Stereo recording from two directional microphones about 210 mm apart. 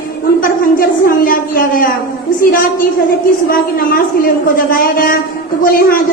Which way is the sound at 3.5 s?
45° left (ahead or behind).